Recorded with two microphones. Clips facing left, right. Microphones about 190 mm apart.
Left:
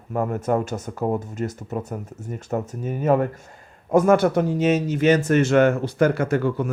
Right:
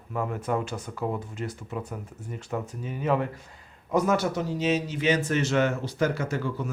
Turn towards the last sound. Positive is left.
turn(degrees=55)  # may be behind; listen again after turning